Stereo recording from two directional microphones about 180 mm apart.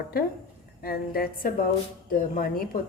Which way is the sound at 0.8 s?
55° left (ahead or behind).